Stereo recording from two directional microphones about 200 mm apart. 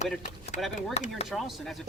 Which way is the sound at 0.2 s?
40° left (ahead or behind).